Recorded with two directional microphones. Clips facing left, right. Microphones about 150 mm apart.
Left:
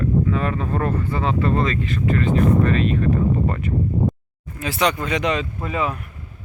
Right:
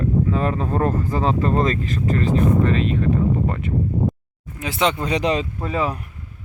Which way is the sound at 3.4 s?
20° right (ahead or behind).